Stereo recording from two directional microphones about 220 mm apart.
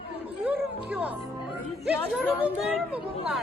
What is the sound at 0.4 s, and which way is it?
Music, 5° right (ahead or behind).